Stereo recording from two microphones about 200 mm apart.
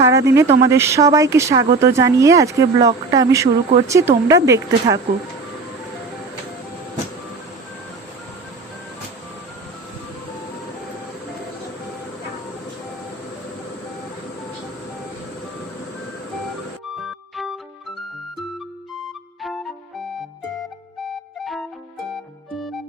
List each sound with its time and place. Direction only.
0.0 s speech: 15° right (ahead or behind)
16.9 s music: centre (ahead or behind)
19.4 s music: centre (ahead or behind)